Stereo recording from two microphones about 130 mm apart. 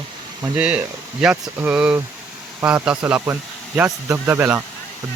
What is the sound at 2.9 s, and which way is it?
Speech, 10° right (ahead or behind).